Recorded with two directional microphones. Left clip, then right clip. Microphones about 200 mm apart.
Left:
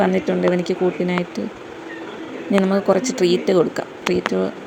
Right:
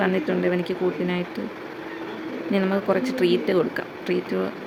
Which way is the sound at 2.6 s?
15° left (ahead or behind).